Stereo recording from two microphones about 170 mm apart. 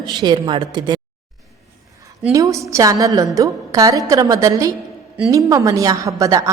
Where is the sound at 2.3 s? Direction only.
20° right (ahead or behind).